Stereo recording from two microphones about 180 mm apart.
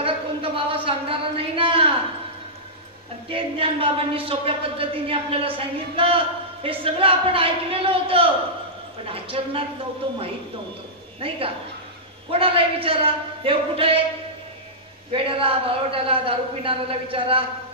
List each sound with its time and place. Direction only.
0.0 s a sound: 30° right (ahead or behind)
3.3 s speech: 30° right (ahead or behind)
15.1 s speech: 30° right (ahead or behind)